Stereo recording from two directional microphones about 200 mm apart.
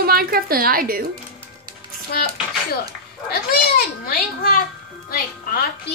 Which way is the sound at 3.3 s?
50° left (ahead or behind).